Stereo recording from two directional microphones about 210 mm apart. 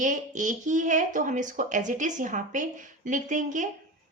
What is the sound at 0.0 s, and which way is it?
Speech, 35° right (ahead or behind).